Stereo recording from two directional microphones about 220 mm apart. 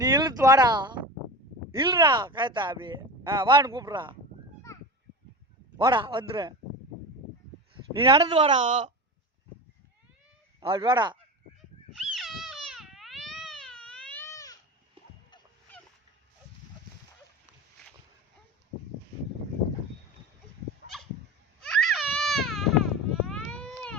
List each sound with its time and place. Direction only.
0.0 s speech: 20° right (ahead or behind)
5.7 s speech: 20° right (ahead or behind)
7.9 s speech: 25° right (ahead or behind)
10.6 s speech: 20° right (ahead or behind)
11.9 s cat: centre (ahead or behind); by 14.6 s 15° left (ahead or behind)
15.7 s dog: 10° left (ahead or behind)
21.6 s baby cry: centre (ahead or behind)